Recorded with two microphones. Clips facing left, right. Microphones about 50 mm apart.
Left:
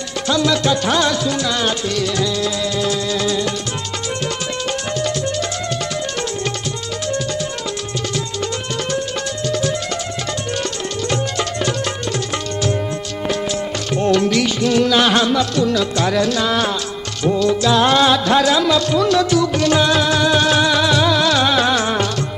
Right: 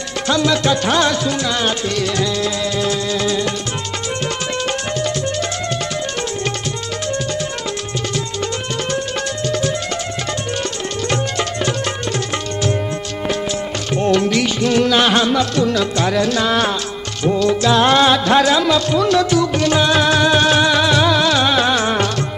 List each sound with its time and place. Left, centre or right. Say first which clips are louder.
0.3 s music: right 1 dB; right
9.5 s music: even; right
14.0 s music: even; right
15.0 s music: even; right
15.5 s music: even; right; by 20.0 s centre
20.0 s music: right 2 dB; right
21.2 s music: even; centre